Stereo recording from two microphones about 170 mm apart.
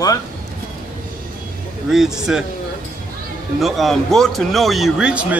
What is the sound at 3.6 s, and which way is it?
Speech, centre (ahead or behind).